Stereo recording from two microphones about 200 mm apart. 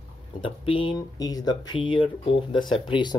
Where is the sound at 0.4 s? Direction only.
25° left (ahead or behind).